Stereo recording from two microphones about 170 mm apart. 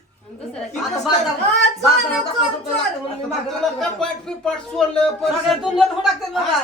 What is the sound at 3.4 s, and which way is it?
Speech, centre (ahead or behind).